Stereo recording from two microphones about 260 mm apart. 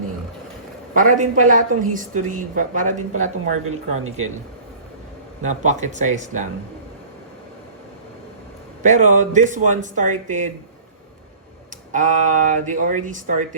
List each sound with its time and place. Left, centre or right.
0.9 s speech: right
5.4 s speech: right
8.8 s speech: right
11.9 s speech: right